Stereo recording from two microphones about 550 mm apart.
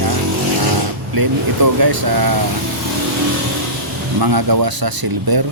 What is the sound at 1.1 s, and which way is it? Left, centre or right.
A man's voice, right.